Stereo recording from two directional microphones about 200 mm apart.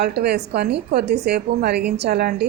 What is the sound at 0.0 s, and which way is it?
A woman's voice, 55° right (ahead or behind).